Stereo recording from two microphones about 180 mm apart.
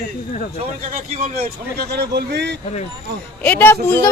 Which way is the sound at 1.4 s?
60° right (ahead or behind).